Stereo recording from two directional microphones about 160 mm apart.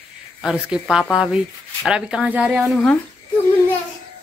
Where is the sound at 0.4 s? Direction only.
Centre (ahead or behind).